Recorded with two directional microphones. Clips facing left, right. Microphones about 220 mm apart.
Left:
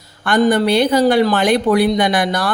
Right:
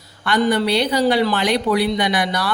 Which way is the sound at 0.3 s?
50° left (ahead or behind).